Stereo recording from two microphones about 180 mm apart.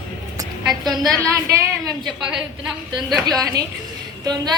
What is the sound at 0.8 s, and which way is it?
Speech, centre (ahead or behind).